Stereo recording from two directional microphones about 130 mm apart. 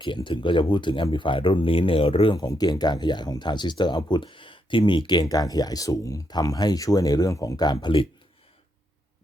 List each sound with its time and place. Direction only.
0.0 s speech: 35° left (ahead or behind)